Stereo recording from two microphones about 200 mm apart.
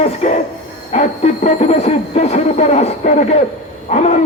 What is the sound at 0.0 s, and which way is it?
Speech, 35° left (ahead or behind).